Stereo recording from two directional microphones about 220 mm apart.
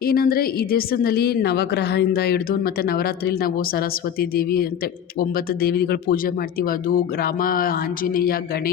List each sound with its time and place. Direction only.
0.0 s a woman's voice: 40° left (ahead or behind)